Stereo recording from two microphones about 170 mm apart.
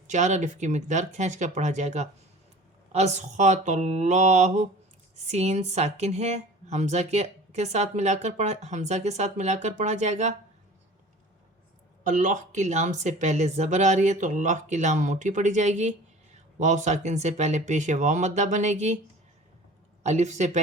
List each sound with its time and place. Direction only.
0.1 s speech: 45° right (ahead or behind)
12.0 s speech: 45° right (ahead or behind)
20.0 s speech: 40° right (ahead or behind)